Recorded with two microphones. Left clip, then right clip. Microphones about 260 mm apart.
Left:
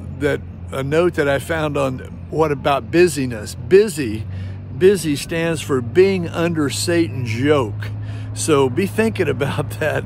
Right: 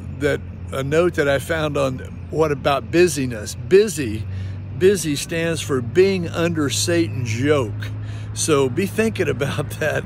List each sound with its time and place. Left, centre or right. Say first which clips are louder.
0.2 s speech: left 1 dB; centre